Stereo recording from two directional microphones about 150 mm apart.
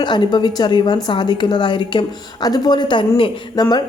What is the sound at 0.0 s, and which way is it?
A woman's voice, 30° left (ahead or behind).